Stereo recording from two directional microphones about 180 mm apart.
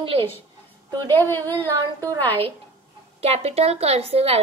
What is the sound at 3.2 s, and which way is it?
A woman's voice, 35° right (ahead or behind).